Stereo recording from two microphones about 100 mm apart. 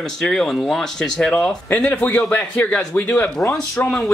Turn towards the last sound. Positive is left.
turn(degrees=15)  # may be behind; listen again after turning